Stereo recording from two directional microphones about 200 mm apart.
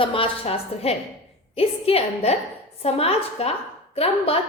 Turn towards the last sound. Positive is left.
turn(degrees=30)  # may be behind; listen again after turning